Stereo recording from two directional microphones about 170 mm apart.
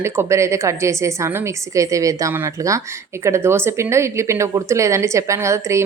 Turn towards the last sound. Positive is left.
turn(degrees=-15)  # may be behind; listen again after turning